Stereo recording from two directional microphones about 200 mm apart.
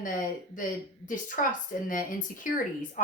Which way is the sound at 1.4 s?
40° left (ahead or behind).